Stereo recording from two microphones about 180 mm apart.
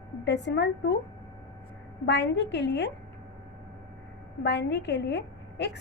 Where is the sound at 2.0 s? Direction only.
70° left (ahead or behind).